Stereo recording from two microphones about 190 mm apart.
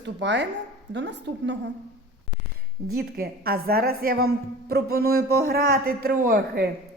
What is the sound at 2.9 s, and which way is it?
A man's voice, 55° right (ahead or behind).